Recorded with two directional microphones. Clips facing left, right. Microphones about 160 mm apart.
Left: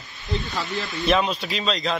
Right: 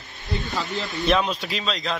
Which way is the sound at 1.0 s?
Centre (ahead or behind).